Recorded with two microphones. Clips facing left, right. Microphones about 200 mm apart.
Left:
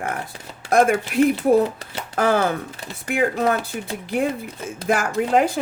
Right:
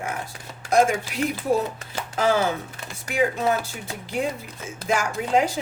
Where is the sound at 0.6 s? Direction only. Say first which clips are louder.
Left 3 dB; 55° left (ahead or behind).